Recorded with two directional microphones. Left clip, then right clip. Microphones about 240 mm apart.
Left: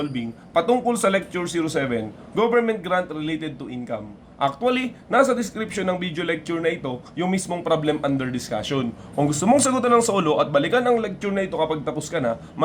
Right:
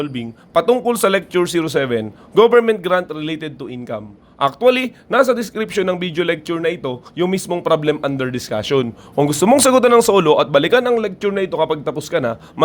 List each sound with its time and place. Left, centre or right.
0.0 s speech: right